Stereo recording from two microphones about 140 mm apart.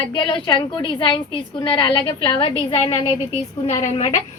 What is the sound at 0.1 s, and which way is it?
A woman's voice, 35° left (ahead or behind).